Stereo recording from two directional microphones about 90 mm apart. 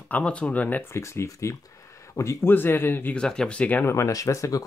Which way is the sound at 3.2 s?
10° left (ahead or behind).